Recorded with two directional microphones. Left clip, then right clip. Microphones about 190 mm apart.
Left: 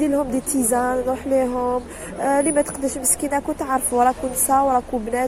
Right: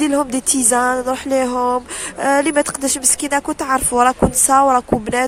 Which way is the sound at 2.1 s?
55° right (ahead or behind).